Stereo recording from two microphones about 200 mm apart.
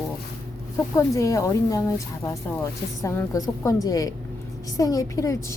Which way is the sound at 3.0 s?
15° left (ahead or behind).